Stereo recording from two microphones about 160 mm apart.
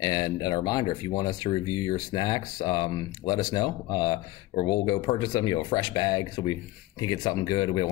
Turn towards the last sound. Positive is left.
turn(degrees=30)  # may be behind; listen again after turning